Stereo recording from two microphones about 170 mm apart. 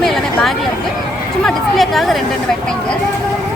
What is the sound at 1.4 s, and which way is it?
Speech, centre (ahead or behind).